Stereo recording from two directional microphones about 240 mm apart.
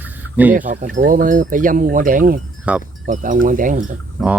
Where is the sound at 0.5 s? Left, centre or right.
Right.